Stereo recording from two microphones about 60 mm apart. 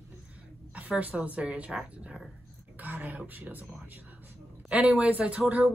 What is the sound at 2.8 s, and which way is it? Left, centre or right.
Speech, right.